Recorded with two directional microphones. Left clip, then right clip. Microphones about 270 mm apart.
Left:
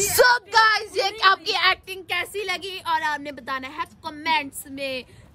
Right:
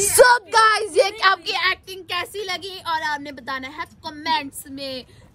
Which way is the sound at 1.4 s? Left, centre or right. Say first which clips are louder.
Left 1 dB; left.